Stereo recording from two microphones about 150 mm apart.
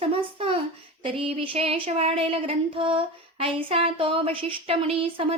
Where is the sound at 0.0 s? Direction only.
40° right (ahead or behind).